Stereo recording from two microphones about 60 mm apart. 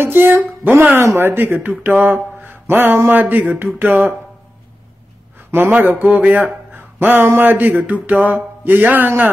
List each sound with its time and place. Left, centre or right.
0.0 s speech: right
5.5 s speech: right